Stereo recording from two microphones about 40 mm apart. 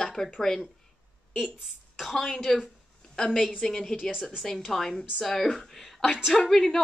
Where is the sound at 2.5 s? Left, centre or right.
Centre.